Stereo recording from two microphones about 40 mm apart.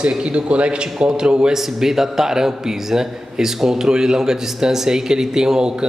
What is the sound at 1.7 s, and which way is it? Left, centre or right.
Speech, centre.